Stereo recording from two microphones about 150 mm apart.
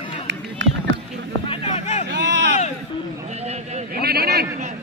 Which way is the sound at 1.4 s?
35° left (ahead or behind).